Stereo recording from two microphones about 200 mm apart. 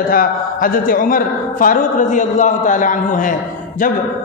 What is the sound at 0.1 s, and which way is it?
A man's voice, 45° left (ahead or behind).